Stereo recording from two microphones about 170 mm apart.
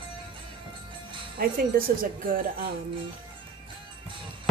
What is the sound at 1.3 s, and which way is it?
Speech, 60° right (ahead or behind).